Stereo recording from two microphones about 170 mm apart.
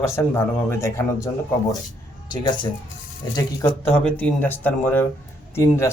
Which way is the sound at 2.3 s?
25° left (ahead or behind).